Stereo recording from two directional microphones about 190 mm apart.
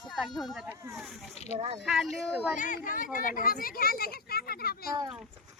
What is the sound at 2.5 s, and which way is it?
A child's voice, 45° left (ahead or behind).